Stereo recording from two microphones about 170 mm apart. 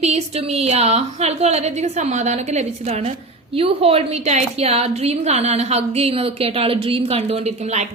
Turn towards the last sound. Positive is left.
turn(degrees=-40)  # may be behind; listen again after turning